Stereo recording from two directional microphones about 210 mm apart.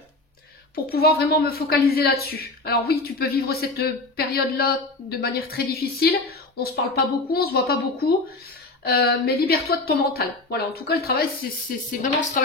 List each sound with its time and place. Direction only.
0.7 s a woman's voice: 45° left (ahead or behind)
12.0 s speech: 35° left (ahead or behind)